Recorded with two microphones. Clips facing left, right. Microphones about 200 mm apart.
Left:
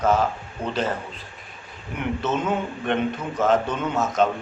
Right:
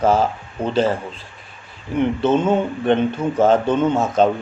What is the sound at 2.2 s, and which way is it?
A man's voice, 30° right (ahead or behind).